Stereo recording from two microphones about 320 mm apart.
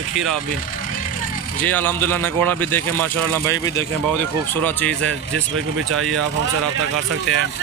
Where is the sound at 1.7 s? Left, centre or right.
Centre.